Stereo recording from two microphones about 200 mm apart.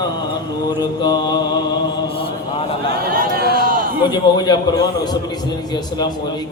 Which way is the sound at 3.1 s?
45° right (ahead or behind).